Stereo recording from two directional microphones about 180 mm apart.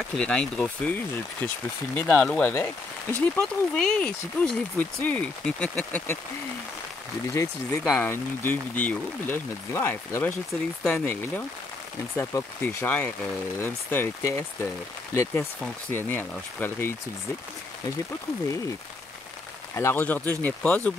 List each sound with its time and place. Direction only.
0.1 s speech: 5° left (ahead or behind)
7.3 s speech: 15° left (ahead or behind)
19.7 s speech: 15° left (ahead or behind)